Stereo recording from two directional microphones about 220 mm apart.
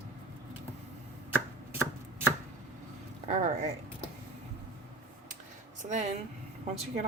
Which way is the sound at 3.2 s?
35° right (ahead or behind).